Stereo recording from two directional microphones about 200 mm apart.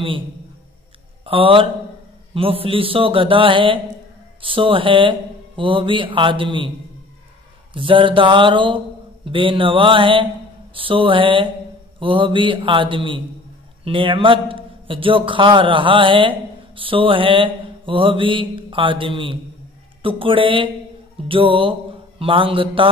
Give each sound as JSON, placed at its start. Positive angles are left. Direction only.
{"t": 1.2, "sound": "a man's voice", "side_deg": -25}
{"t": 7.7, "sound": "a man's voice", "side_deg": -25}